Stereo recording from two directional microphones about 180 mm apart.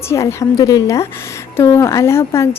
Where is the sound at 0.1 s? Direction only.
15° left (ahead or behind).